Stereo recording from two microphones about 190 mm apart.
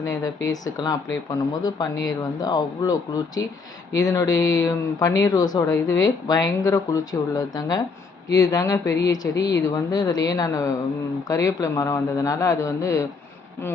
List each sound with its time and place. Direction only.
0.0 s speech: 15° left (ahead or behind)